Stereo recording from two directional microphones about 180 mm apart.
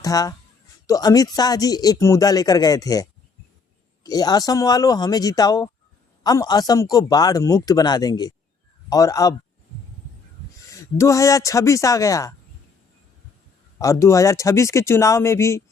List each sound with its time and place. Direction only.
0.0 s a man's voice: 20° left (ahead or behind)
10.7 s speech: 15° left (ahead or behind)
13.7 s speech: 15° left (ahead or behind)